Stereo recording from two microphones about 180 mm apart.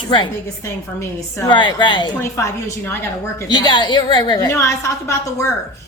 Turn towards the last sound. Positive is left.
turn(degrees=15)  # may be behind; listen again after turning